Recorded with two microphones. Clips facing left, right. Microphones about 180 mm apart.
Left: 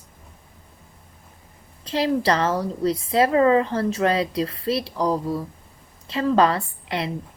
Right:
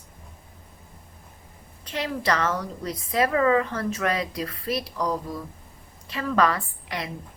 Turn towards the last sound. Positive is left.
turn(degrees=30)  # may be behind; listen again after turning